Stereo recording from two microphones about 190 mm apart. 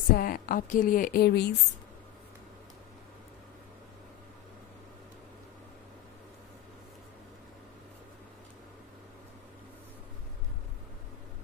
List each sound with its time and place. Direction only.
0.1 s a woman's voice: 50° left (ahead or behind)